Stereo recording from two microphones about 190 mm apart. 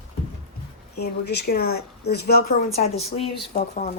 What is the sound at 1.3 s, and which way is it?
Speech, 55° left (ahead or behind).